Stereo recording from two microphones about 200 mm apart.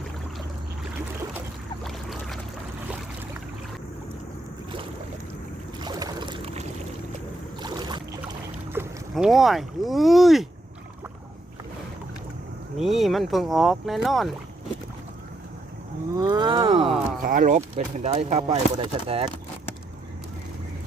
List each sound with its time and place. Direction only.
1.8 s boat: centre (ahead or behind)
5.8 s pour: 20° right (ahead or behind)
7.6 s boat: 20° right (ahead or behind)
9.1 s speech: centre (ahead or behind)
12.7 s speech: centre (ahead or behind)
16.1 s wild animals: 20° right (ahead or behind)
17.2 s speech: 40° right (ahead or behind)